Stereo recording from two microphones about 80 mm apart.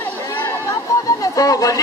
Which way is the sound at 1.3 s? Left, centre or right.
Left.